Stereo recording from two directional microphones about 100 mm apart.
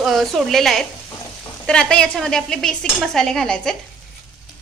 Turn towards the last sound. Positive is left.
turn(degrees=5)  # may be behind; listen again after turning